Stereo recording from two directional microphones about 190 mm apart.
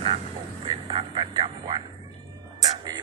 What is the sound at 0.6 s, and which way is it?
Vehicle, 30° right (ahead or behind).